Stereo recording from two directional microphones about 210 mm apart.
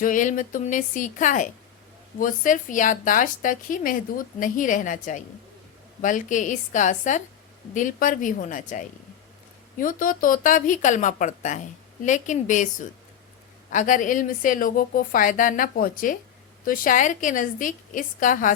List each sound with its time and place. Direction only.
0.0 s a woman's voice: 40° left (ahead or behind)